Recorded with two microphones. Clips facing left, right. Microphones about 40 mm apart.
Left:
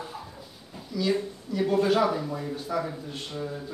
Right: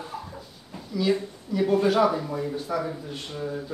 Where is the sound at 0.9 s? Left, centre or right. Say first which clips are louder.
Right 2 dB; centre.